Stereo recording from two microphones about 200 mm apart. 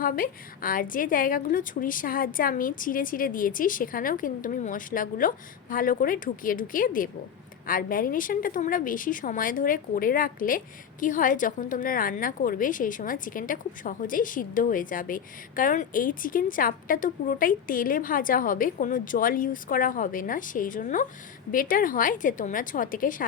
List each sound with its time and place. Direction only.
0.0 s a woman's voice: 45° left (ahead or behind)